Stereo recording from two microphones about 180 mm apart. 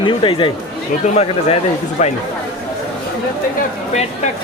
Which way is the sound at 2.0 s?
45° left (ahead or behind).